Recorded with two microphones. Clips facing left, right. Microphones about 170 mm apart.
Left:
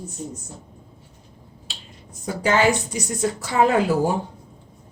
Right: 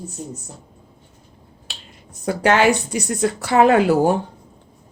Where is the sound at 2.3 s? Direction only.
70° right (ahead or behind).